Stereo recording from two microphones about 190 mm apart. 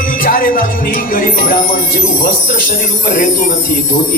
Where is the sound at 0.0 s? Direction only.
45° left (ahead or behind).